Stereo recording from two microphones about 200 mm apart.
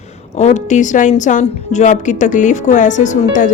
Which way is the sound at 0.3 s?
35° left (ahead or behind).